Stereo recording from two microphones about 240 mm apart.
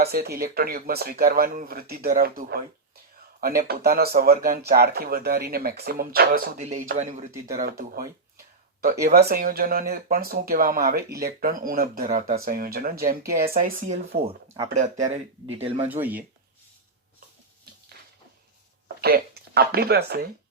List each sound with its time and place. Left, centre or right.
0.0 s speech: right
7.3 s speech: centre
7.6 s speech: right
9.0 s speech: right
15.9 s speech: centre
19.0 s speech: right